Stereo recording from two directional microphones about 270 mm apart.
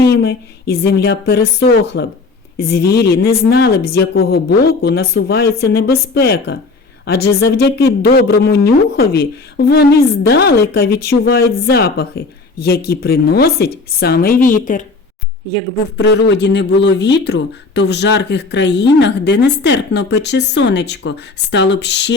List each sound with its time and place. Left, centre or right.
0.0 s speech: left
16.0 s speech: left